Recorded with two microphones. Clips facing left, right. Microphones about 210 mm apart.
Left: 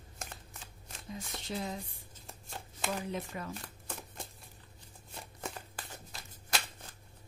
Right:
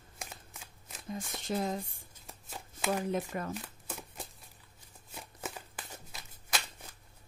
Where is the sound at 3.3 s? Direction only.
50° right (ahead or behind).